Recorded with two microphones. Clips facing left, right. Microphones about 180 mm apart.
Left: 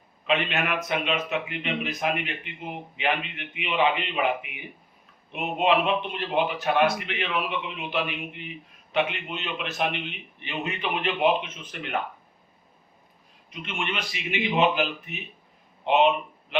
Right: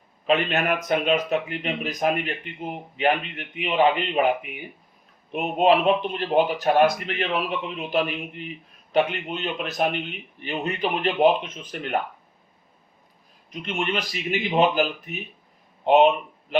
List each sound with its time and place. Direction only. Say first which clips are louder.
0.3 s a man's voice: right 4 dB; 40° right (ahead or behind)
13.5 s a man's voice: right 5 dB; 40° right (ahead or behind)
15.8 s a sound: right 4 dB; 40° right (ahead or behind)